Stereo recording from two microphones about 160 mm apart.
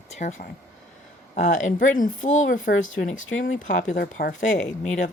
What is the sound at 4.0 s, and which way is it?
Speech, 65° left (ahead or behind).